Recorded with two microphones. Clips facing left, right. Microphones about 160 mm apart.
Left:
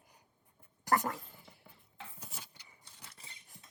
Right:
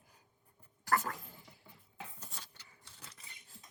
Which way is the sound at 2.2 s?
10° left (ahead or behind).